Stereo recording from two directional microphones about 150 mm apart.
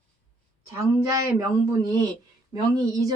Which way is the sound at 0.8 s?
20° right (ahead or behind).